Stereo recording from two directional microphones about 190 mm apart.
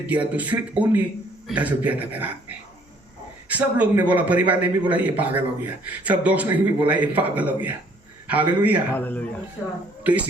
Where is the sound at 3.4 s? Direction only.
5° right (ahead or behind).